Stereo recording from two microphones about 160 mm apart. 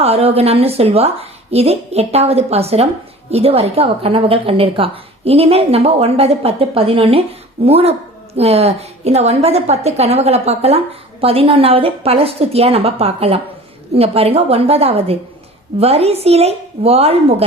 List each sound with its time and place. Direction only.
0.0 s a woman's voice: 40° right (ahead or behind)